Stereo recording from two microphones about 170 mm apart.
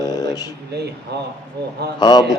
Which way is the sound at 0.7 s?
75° right (ahead or behind).